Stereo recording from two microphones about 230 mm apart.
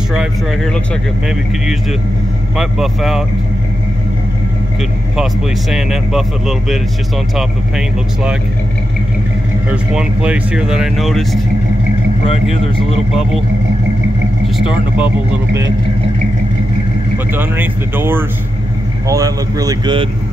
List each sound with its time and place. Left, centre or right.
0.1 s speech: centre
2.5 s speech: centre
5.1 s speech: centre
9.7 s speech: centre
15.0 s speech: centre
17.3 s speech: centre